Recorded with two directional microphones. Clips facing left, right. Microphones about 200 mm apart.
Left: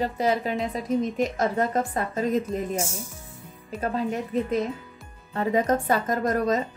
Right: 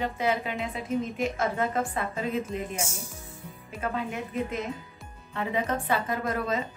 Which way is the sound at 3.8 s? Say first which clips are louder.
Left 4 dB; 35° left (ahead or behind).